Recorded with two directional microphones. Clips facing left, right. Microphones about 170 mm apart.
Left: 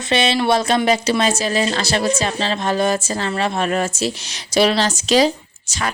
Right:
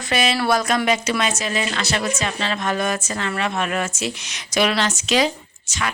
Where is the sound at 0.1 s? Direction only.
25° left (ahead or behind).